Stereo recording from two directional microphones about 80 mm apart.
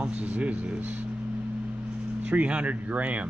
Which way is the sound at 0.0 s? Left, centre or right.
Centre.